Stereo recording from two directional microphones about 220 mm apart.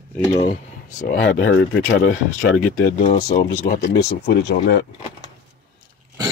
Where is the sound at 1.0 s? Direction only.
45° left (ahead or behind).